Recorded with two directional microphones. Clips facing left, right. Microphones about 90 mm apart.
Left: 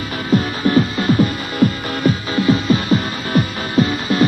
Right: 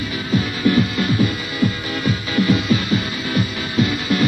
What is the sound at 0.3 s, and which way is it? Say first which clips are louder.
Music: left 2 dB; 40° left (ahead or behind).